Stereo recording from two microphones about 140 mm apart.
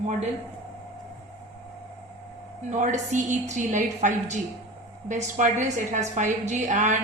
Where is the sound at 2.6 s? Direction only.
60° right (ahead or behind).